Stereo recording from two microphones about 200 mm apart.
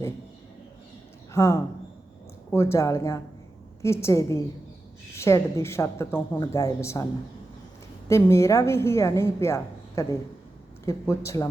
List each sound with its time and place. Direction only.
1.3 s a woman's voice: 15° left (ahead or behind)